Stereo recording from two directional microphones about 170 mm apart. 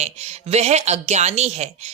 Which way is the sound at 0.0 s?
40° right (ahead or behind).